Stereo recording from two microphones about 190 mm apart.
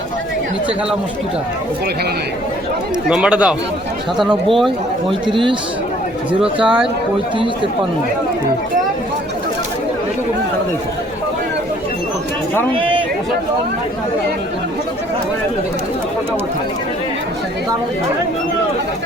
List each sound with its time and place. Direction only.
3.1 s speech: 5° right (ahead or behind)
5.2 s speech: 25° right (ahead or behind)
12.7 s speech: 25° right (ahead or behind)